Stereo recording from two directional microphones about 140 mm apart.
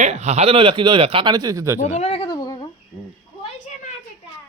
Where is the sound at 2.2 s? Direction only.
30° left (ahead or behind).